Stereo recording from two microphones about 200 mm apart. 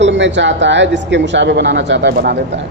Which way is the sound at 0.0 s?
65° right (ahead or behind).